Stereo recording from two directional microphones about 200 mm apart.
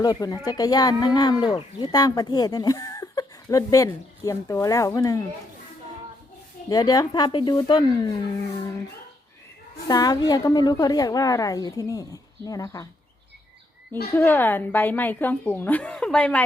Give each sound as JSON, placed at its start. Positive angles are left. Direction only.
{"t": 0.0, "sound": "a woman's voice", "side_deg": 20}
{"t": 6.7, "sound": "speech", "side_deg": 20}
{"t": 9.8, "sound": "a woman's voice", "side_deg": 20}
{"t": 14.1, "sound": "a woman's voice", "side_deg": 10}